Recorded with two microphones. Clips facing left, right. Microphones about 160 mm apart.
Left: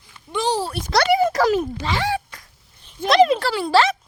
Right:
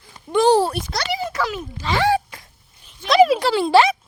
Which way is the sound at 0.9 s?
55° left (ahead or behind).